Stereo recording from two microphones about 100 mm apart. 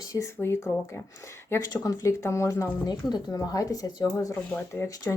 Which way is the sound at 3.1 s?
40° left (ahead or behind).